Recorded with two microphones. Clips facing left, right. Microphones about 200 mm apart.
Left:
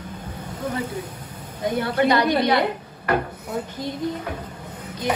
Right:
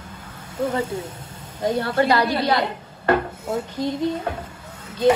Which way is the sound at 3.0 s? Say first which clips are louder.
Right 3 dB; 25° right (ahead or behind).